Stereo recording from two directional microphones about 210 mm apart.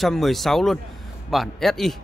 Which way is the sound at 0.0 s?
Centre (ahead or behind).